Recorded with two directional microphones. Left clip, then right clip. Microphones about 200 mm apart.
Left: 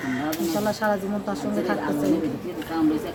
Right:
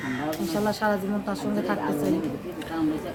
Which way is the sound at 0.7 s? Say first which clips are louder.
Even; 5° right (ahead or behind).